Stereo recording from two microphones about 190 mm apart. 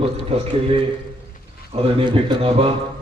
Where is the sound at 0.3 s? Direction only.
30° right (ahead or behind).